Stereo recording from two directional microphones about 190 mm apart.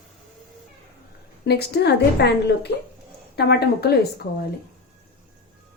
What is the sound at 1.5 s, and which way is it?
A woman's voice, 60° left (ahead or behind).